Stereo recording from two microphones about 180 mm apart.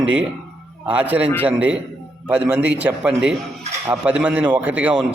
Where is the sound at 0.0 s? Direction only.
5° right (ahead or behind).